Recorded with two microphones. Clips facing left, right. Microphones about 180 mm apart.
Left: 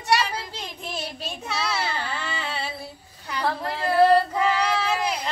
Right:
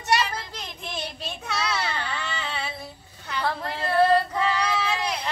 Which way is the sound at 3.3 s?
35° left (ahead or behind).